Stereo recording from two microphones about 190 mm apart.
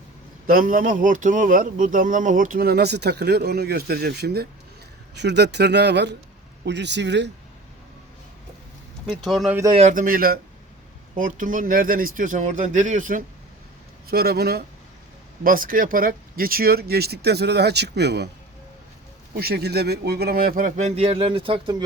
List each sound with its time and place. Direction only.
0.4 s speech: 45° right (ahead or behind); by 7.3 s 65° right (ahead or behind)
9.0 s speech: centre (ahead or behind)
9.7 s speech: 40° right (ahead or behind)
14.1 s speech: 55° right (ahead or behind)
19.4 s speech: 55° right (ahead or behind); by 21.8 s 25° right (ahead or behind)